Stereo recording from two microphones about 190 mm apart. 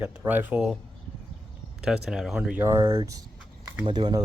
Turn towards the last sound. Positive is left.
turn(degrees=-25)  # may be behind; listen again after turning